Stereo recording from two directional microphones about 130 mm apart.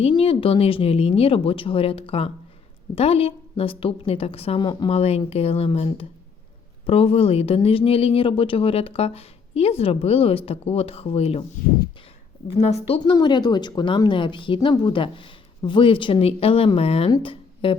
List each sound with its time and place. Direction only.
0.0 s speech: 45° left (ahead or behind)
4.6 s a woman's voice: 35° left (ahead or behind)
4.9 s speech: 50° left (ahead or behind)
12.5 s speech: 50° left (ahead or behind)
13.0 s a woman's voice: 35° left (ahead or behind)